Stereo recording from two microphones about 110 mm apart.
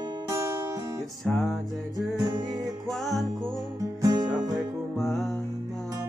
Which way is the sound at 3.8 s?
35° right (ahead or behind).